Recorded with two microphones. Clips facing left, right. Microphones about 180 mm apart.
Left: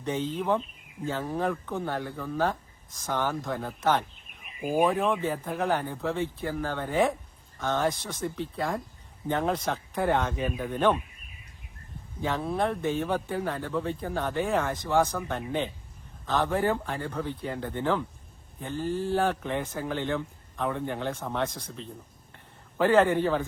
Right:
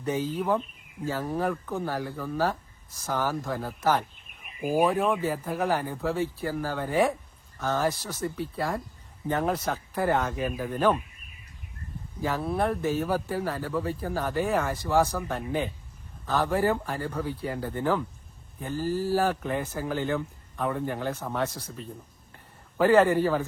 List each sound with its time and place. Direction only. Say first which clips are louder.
0.0 s speech: right 1 dB; 5° right (ahead or behind)
12.2 s speech: right 1 dB; 5° right (ahead or behind)